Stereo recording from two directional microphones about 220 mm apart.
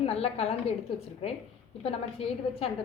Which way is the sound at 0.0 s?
25° left (ahead or behind).